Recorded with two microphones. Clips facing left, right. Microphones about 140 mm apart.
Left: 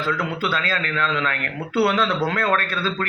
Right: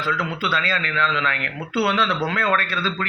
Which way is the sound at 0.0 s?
45° left (ahead or behind).